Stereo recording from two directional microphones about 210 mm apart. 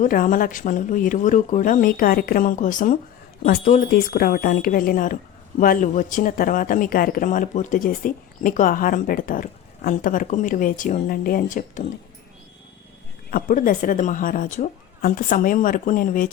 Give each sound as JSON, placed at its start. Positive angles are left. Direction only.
{"t": 0.0, "sound": "speech", "side_deg": 40}
{"t": 13.3, "sound": "speech", "side_deg": 40}